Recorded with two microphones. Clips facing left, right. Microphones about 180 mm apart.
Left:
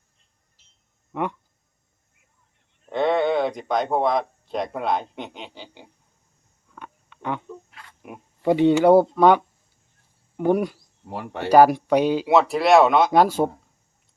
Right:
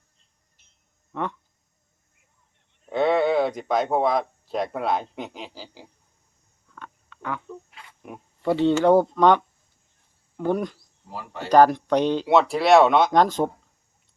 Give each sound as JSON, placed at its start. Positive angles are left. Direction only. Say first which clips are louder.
{"t": 1.1, "sound": "speech", "louder": "left 3 dB", "side_deg": 15}
{"t": 2.8, "sound": "speech", "louder": "even", "side_deg": 0}
{"t": 6.7, "sound": "a sound", "louder": "left 1 dB", "side_deg": 15}
{"t": 8.0, "sound": "a sound", "louder": "even", "side_deg": 5}
{"t": 8.4, "sound": "speech", "louder": "left 3 dB", "side_deg": 15}
{"t": 11.1, "sound": "speech", "louder": "left 4 dB", "side_deg": 65}
{"t": 11.4, "sound": "speech", "louder": "left 2 dB", "side_deg": 10}